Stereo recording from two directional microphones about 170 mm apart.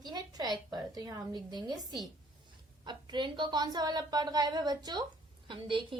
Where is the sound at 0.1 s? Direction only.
25° right (ahead or behind).